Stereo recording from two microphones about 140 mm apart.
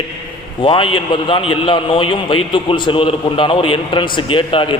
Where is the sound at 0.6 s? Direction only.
35° left (ahead or behind).